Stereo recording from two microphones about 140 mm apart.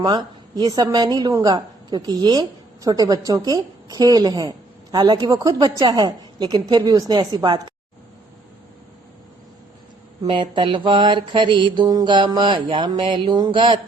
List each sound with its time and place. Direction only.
0.0 s a woman's voice: 30° right (ahead or behind)
10.2 s mantra: 40° right (ahead or behind)